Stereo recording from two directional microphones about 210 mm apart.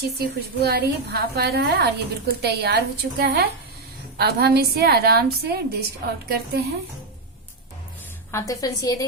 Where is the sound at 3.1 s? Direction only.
50° right (ahead or behind).